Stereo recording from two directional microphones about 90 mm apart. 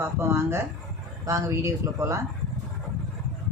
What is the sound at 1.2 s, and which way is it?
Speech, 35° right (ahead or behind).